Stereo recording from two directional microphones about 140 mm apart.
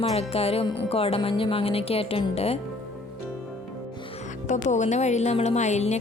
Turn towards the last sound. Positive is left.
turn(degrees=55)  # may be behind; listen again after turning